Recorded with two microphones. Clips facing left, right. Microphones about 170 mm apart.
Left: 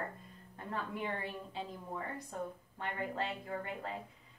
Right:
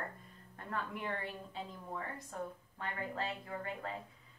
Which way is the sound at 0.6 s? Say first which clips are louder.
Left 1 dB; 25° left (ahead or behind).